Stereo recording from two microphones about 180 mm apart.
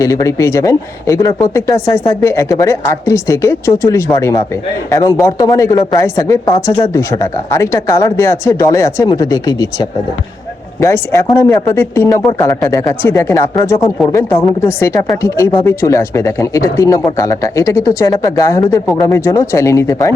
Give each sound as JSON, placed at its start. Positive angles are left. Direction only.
{"t": 0.0, "sound": "a woman's voice", "side_deg": 20}
{"t": 6.9, "sound": "speech", "side_deg": 15}